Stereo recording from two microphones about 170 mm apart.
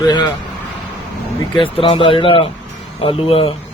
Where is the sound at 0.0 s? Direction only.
25° left (ahead or behind).